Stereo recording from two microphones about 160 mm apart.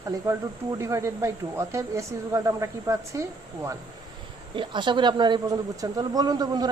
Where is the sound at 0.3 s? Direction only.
20° right (ahead or behind).